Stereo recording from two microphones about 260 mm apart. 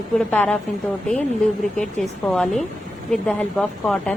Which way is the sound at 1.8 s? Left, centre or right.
Centre.